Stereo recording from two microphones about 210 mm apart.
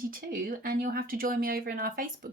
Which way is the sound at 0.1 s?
45° right (ahead or behind).